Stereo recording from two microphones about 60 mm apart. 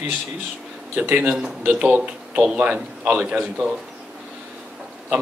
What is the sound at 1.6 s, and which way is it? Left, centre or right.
Speech, right.